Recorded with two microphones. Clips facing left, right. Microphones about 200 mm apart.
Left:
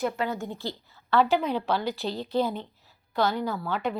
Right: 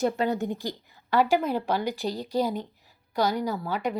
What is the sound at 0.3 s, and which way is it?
A woman's voice, 15° right (ahead or behind).